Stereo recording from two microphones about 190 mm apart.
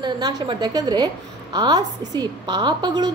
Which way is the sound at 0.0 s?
25° right (ahead or behind).